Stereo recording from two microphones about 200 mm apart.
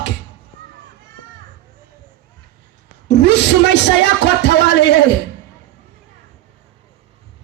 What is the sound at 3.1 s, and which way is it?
Speech, 60° left (ahead or behind).